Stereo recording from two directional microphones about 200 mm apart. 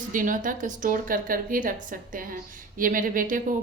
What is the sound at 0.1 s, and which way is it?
A woman's voice, 40° right (ahead or behind).